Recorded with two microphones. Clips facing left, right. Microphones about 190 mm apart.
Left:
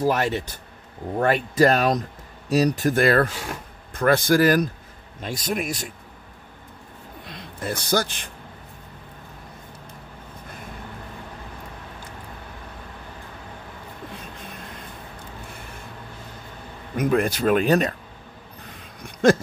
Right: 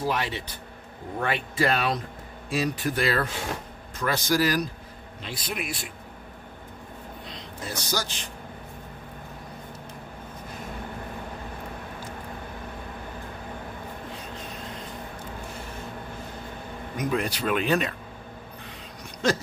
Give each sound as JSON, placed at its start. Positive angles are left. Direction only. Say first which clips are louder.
{"t": 0.0, "sound": "speech", "louder": "left 6 dB", "side_deg": 45}
{"t": 7.2, "sound": "a man's voice", "louder": "left 8 dB", "side_deg": 55}
{"t": 16.9, "sound": "speech", "louder": "left 6 dB", "side_deg": 55}